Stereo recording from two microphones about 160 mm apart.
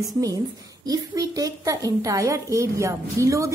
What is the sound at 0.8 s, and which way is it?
A woman's voice, 25° right (ahead or behind).